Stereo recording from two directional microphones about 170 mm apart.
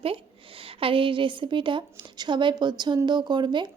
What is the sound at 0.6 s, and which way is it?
A woman's voice, 30° right (ahead or behind).